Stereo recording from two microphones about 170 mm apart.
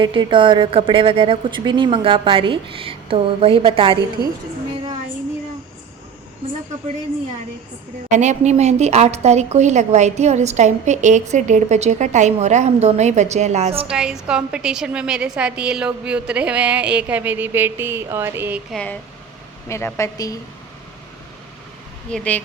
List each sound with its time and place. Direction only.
0.0 s a woman's voice: 30° right (ahead or behind)
8.1 s a woman's voice: 45° right (ahead or behind)
13.9 s a woman's voice: 5° right (ahead or behind)
18.7 s a woman's voice: 5° left (ahead or behind)
22.1 s a woman's voice: 10° left (ahead or behind)